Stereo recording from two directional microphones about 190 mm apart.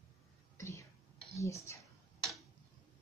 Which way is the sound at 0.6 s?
15° left (ahead or behind).